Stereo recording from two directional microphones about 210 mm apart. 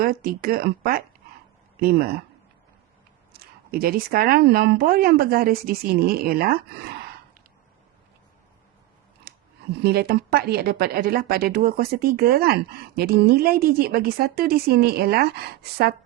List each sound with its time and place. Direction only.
0.0 s speech: 45° right (ahead or behind)
3.4 s speech: 45° right (ahead or behind)
9.3 s scissors: 45° right (ahead or behind)
9.8 s speech: 50° right (ahead or behind)